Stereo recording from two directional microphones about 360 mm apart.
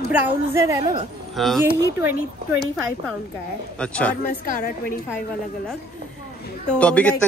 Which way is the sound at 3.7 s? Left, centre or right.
Centre.